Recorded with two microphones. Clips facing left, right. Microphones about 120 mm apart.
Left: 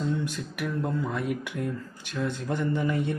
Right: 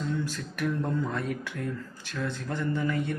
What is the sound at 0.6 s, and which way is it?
Speech, 5° left (ahead or behind).